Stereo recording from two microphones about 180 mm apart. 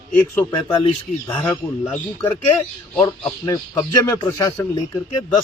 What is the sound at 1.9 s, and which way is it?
Speech, 5° left (ahead or behind).